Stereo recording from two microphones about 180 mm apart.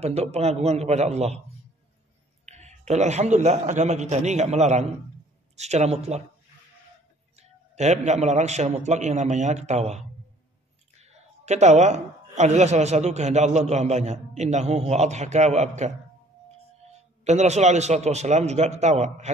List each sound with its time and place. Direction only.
0.0 s a woman's voice: 35° right (ahead or behind)
2.4 s a woman's voice: 40° right (ahead or behind)
7.3 s a woman's voice: 40° right (ahead or behind)
17.2 s a woman's voice: 40° right (ahead or behind)